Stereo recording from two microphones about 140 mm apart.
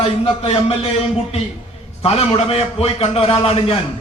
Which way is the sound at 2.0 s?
45° left (ahead or behind).